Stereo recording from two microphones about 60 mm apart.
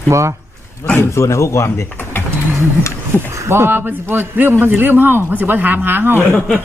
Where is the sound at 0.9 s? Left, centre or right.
Left.